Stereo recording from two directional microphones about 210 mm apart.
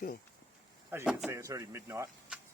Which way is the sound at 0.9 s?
5° right (ahead or behind).